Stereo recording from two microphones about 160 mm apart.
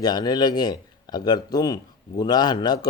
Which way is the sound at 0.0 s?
25° left (ahead or behind).